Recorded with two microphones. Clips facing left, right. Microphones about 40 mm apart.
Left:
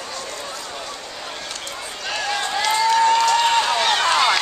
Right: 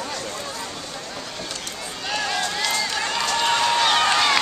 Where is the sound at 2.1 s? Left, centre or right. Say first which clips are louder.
Left 2 dB; centre.